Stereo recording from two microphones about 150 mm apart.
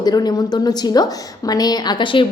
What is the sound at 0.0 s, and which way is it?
A woman's voice, 25° left (ahead or behind).